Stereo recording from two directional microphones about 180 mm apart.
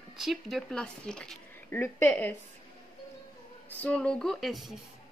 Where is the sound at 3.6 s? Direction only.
10° left (ahead or behind).